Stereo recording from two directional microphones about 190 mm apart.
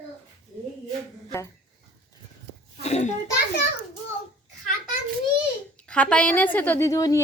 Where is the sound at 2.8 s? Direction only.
35° left (ahead or behind).